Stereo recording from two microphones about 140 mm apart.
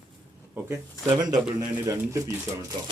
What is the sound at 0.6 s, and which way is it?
Speech, 15° right (ahead or behind).